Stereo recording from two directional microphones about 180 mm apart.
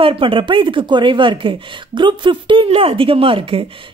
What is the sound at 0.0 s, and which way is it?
Speech, 30° right (ahead or behind).